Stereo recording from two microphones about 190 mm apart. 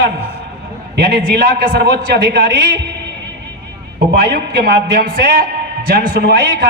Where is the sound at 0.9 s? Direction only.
60° right (ahead or behind).